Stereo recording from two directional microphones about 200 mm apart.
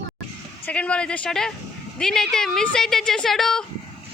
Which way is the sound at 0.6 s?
5° left (ahead or behind).